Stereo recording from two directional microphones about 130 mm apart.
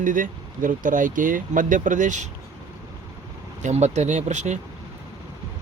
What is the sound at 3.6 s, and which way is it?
Speech, 60° right (ahead or behind).